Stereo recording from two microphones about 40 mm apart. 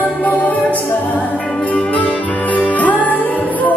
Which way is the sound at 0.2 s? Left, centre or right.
Left.